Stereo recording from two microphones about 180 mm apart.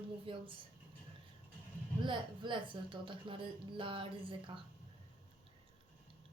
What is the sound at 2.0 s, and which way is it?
Speech, 25° right (ahead or behind).